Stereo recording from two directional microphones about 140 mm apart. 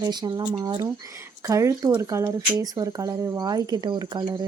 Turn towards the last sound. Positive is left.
turn(degrees=-30)  # may be behind; listen again after turning